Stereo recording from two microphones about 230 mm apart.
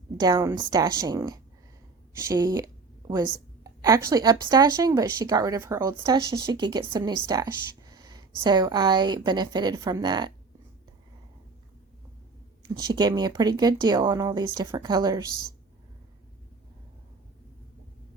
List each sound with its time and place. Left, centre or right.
0.2 s speech: centre
3.0 s a sound: centre
3.6 s a woman's voice: centre
12.6 s speech: centre